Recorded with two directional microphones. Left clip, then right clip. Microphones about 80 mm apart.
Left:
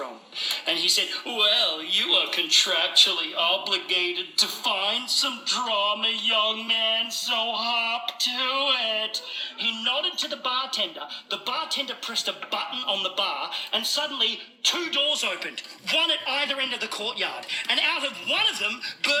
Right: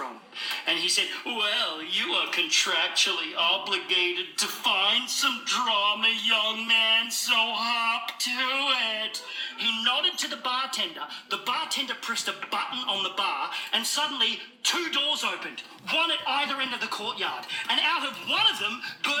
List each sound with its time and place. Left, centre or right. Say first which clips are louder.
0.4 s speech: left 2 dB; left
15.0 s speech: left 2 dB; left
16.4 s speech: left 2 dB; centre
16.8 s speech: left 1 dB; centre
17.5 s speech: left 2 dB; left
18.3 s speech: right 1 dB; left